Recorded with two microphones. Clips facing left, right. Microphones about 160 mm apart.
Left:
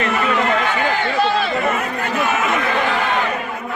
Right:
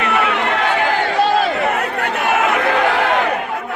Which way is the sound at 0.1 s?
70° right (ahead or behind).